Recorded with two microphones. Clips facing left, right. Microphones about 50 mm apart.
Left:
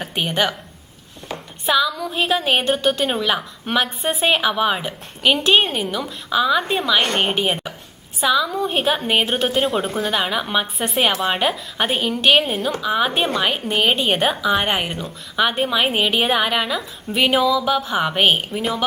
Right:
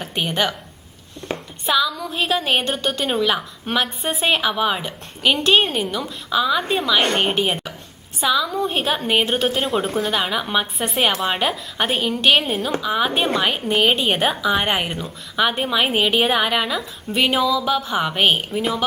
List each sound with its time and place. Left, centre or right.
0.1 s a woman's voice: centre
1.3 s a sound: right
1.6 s a woman's voice: centre